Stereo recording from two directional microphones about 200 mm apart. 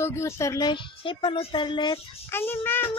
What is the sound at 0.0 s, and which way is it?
A woman's voice, 15° left (ahead or behind).